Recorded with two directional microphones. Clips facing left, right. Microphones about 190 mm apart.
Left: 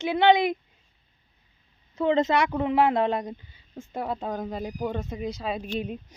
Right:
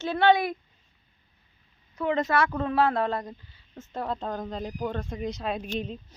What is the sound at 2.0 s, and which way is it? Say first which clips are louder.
Speech: left 3 dB; 25° left (ahead or behind).